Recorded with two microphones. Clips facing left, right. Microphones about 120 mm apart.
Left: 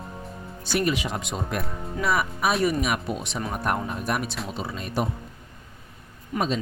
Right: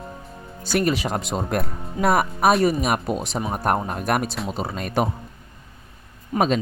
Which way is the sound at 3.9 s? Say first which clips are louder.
Right 5 dB; 65° right (ahead or behind).